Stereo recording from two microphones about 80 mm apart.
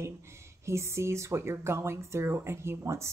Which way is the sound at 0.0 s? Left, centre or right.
Right.